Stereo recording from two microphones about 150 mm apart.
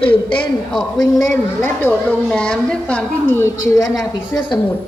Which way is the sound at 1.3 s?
15° left (ahead or behind).